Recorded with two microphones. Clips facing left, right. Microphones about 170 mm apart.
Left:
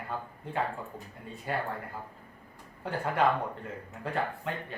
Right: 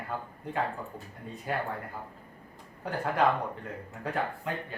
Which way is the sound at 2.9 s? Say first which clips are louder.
Right 1 dB; centre (ahead or behind).